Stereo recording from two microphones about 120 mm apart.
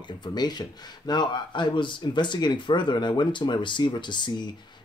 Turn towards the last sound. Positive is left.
turn(degrees=40)  # may be behind; listen again after turning